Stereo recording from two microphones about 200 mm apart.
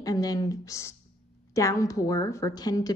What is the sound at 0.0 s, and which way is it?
A woman's voice, 20° left (ahead or behind).